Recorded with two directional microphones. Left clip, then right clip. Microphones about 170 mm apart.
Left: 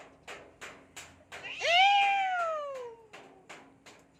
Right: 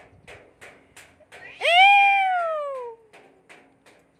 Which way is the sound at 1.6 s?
50° right (ahead or behind).